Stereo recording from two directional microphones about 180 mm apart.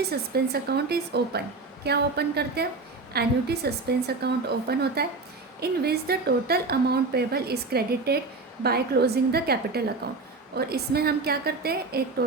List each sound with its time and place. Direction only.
0.0 s a woman's voice: 60° right (ahead or behind)